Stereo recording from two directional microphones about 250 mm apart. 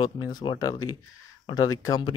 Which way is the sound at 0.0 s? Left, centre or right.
Centre.